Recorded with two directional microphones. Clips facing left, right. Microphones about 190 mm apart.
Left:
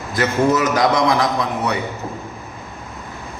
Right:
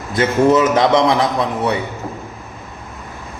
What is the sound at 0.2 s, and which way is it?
A man's voice, 25° right (ahead or behind).